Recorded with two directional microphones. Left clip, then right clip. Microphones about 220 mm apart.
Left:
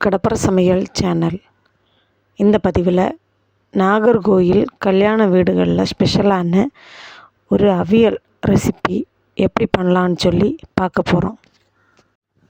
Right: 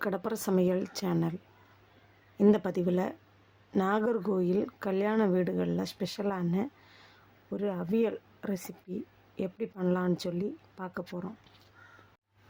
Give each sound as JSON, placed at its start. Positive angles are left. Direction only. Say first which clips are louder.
{"t": 0.0, "sound": "a woman's voice", "louder": "left 17 dB", "side_deg": 40}
{"t": 2.5, "sound": "a woman's voice", "louder": "left 14 dB", "side_deg": 40}